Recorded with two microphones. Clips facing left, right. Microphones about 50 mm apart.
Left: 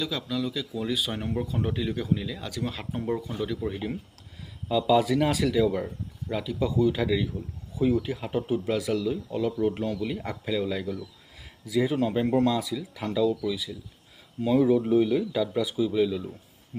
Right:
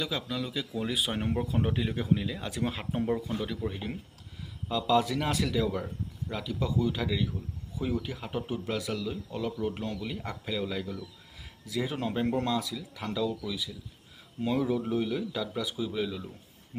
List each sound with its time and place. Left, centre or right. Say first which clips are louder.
0.0 s speech: left 3 dB; centre
3.6 s speech: left 4 dB; centre
12.5 s speech: left 3 dB; centre
13.0 s speech: left 6 dB; centre
14.4 s speech: left 7 dB; centre